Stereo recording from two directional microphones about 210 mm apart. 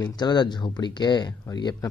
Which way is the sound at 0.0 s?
20° left (ahead or behind).